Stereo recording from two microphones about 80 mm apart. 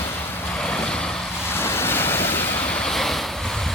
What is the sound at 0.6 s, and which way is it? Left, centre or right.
Vehicle, centre.